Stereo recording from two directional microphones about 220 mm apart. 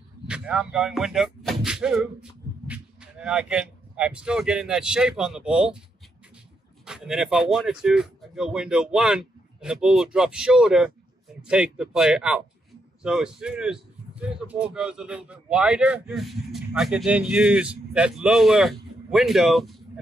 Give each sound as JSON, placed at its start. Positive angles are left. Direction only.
{"t": 0.3, "sound": "speech", "side_deg": -5}
{"t": 6.9, "sound": "a man's voice", "side_deg": 0}